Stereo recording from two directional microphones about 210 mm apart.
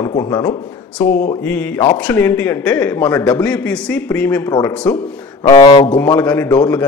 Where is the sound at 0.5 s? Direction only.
5° left (ahead or behind).